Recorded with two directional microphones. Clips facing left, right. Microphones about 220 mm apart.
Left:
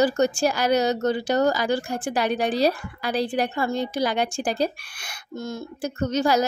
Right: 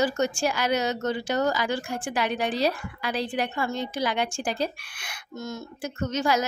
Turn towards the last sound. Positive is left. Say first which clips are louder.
# left 4 dB
turn(degrees=35)  # may be behind; listen again after turning